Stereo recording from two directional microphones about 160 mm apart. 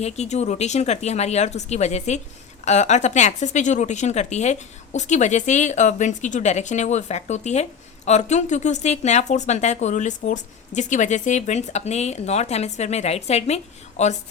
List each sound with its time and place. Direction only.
0.0 s speech: 45° left (ahead or behind)